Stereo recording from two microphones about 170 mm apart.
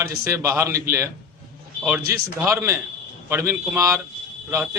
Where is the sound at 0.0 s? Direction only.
15° right (ahead or behind).